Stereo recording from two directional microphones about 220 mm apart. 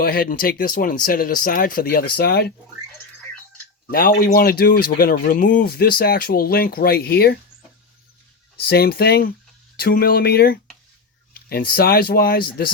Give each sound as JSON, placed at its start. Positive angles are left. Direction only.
{"t": 0.0, "sound": "speech", "side_deg": 40}
{"t": 3.9, "sound": "speech", "side_deg": 40}
{"t": 8.5, "sound": "speech", "side_deg": 45}